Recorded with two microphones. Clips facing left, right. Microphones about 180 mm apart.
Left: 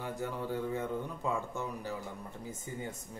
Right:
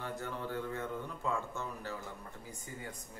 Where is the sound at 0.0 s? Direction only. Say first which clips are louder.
Left 3 dB; 10° left (ahead or behind).